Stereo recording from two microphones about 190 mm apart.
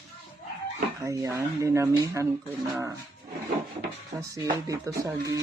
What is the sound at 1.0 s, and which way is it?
Speech, 15° right (ahead or behind).